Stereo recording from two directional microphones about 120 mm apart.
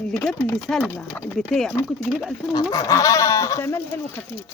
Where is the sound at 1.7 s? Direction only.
20° left (ahead or behind).